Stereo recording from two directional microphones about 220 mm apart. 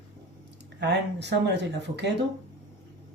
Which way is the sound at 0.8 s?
50° right (ahead or behind).